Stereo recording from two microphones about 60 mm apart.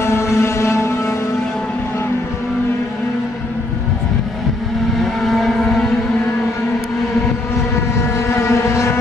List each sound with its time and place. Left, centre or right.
0.0 s a sound: left
5.3 s vehicle: centre
8.3 s vehicle: left